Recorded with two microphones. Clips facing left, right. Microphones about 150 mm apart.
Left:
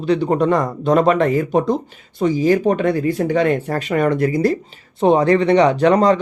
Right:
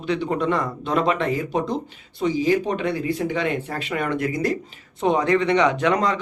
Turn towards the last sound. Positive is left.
turn(degrees=35)  # may be behind; listen again after turning